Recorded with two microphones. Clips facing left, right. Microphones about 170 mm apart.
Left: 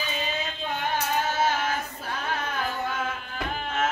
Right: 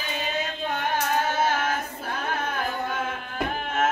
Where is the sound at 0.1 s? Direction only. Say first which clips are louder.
Right 2 dB; 55° right (ahead or behind).